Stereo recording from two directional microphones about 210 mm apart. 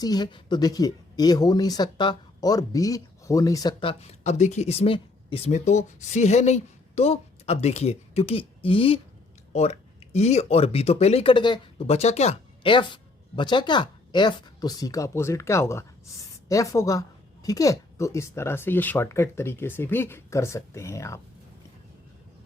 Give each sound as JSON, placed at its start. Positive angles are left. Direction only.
{"t": 0.0, "sound": "speech", "side_deg": 20}